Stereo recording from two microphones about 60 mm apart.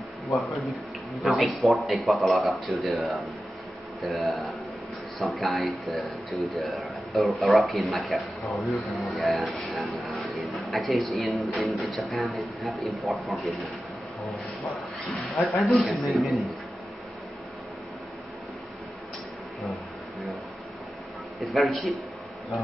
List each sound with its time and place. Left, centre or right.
0.7 s speech: centre
15.3 s speech: centre
21.5 s speech: centre